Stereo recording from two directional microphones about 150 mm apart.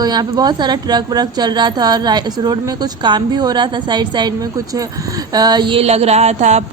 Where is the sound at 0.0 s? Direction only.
25° right (ahead or behind).